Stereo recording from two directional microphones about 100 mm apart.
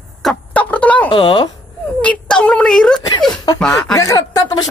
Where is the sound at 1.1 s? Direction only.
55° left (ahead or behind).